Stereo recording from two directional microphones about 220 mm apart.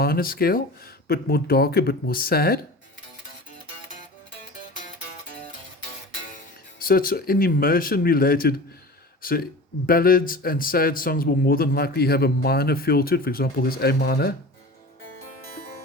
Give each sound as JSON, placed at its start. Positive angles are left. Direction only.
{"t": 0.0, "sound": "a man's voice", "side_deg": 45}
{"t": 6.8, "sound": "a man's voice", "side_deg": 40}